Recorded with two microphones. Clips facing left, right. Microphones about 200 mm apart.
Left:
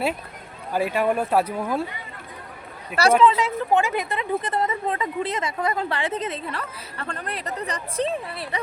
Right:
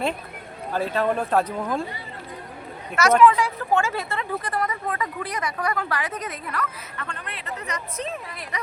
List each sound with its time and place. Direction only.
0.7 s speech: 10° left (ahead or behind)
3.2 s speech: 25° left (ahead or behind)